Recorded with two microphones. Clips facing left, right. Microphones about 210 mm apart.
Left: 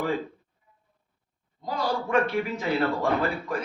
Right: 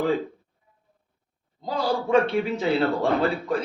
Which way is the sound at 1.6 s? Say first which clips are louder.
Right 3 dB; 30° right (ahead or behind).